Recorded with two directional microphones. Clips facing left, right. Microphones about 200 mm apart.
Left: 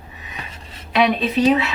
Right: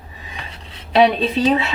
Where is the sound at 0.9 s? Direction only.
30° right (ahead or behind).